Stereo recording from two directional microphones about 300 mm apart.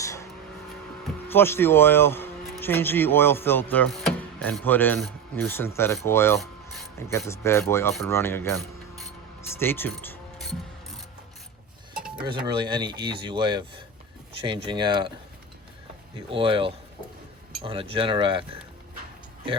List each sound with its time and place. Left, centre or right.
0.0 s vehicle: centre
1.0 s speech: centre
11.9 s a sound: centre
12.5 s speech: centre
16.3 s speech: centre